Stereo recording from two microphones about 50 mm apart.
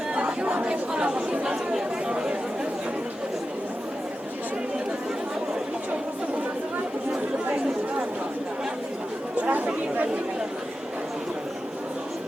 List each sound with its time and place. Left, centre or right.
0.2 s chatter: right
9.3 s chatter: right